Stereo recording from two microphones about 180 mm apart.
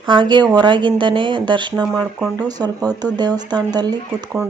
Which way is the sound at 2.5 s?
20° right (ahead or behind).